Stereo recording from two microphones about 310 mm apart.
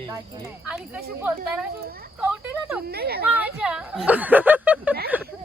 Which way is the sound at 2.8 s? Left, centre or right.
Right.